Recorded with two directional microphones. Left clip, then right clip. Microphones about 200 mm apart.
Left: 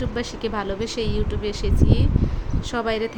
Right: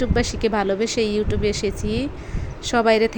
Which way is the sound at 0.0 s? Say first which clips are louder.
Right 6 dB; 20° right (ahead or behind).